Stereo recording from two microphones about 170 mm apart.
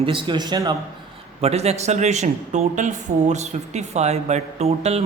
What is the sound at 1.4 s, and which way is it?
A woman's voice, 40° right (ahead or behind).